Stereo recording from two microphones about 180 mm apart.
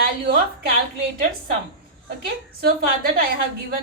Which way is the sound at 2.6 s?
60° right (ahead or behind).